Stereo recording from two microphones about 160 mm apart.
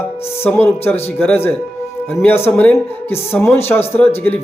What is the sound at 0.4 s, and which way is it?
Speech, 15° left (ahead or behind).